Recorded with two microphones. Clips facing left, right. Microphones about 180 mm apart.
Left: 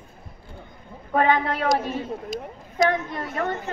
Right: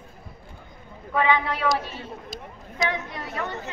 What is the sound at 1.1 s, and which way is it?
Speech, 45° left (ahead or behind).